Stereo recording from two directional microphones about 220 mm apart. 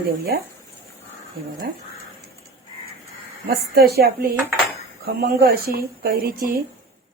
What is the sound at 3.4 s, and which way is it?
Speech, 45° right (ahead or behind).